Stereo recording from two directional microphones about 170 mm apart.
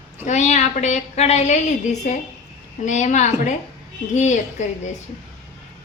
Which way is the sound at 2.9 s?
45° left (ahead or behind).